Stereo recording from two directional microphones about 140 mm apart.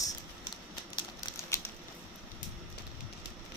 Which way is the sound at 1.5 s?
20° left (ahead or behind).